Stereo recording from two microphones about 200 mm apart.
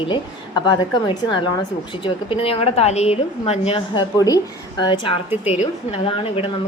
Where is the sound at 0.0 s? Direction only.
25° left (ahead or behind).